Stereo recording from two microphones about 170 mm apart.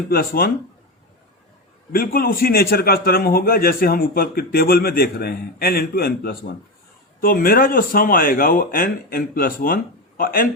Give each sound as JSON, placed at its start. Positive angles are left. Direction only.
{"t": 0.1, "sound": "a man's voice", "side_deg": 60}
{"t": 2.1, "sound": "a man's voice", "side_deg": 60}